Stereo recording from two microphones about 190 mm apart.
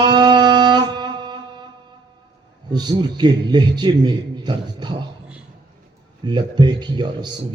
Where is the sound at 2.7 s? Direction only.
20° right (ahead or behind).